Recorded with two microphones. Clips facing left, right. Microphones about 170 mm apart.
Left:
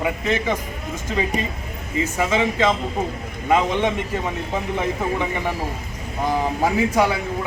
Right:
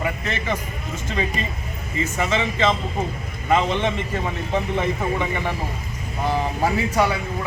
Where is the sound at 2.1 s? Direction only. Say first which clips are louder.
Left 2 dB; 10° left (ahead or behind).